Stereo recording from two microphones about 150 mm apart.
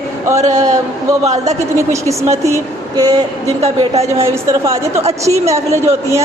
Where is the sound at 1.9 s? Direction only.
20° right (ahead or behind).